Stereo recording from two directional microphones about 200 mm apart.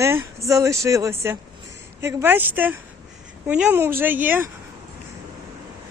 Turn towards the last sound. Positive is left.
turn(degrees=-10)  # may be behind; listen again after turning